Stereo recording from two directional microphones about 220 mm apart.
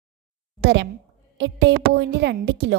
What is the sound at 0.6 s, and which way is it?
A woman's voice, 55° right (ahead or behind).